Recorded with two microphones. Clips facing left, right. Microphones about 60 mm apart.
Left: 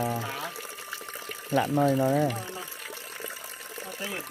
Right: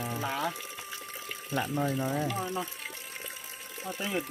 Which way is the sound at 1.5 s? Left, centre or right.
Left.